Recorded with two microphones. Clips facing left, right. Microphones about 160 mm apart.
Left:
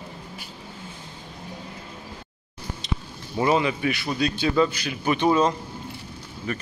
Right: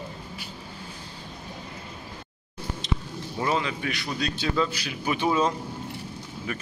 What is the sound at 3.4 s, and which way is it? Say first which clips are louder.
Speech: left 6 dB; 10° left (ahead or behind).